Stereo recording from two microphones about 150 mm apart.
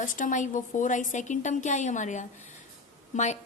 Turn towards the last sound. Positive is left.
turn(degrees=50)  # may be behind; listen again after turning